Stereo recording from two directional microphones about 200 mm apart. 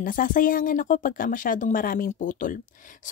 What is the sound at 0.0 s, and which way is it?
Speech, 45° left (ahead or behind).